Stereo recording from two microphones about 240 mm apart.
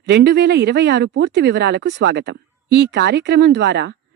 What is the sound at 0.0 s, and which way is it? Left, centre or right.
Speech, right.